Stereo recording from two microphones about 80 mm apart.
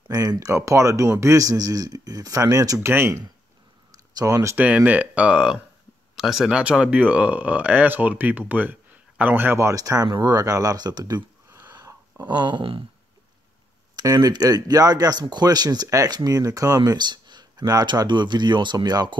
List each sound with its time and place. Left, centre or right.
0.5 s speech: right
2.8 s speech: right
4.1 s speech: right
4.6 s speech: centre
6.1 s speech: centre; by 11.2 s right
12.3 s speech: right
13.9 s speech: right
16.3 s speech: right